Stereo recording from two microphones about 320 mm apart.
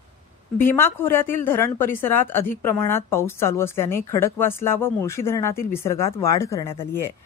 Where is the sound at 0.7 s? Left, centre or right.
Centre.